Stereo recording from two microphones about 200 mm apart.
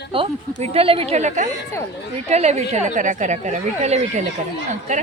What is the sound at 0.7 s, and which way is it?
A woman's voice, 30° right (ahead or behind).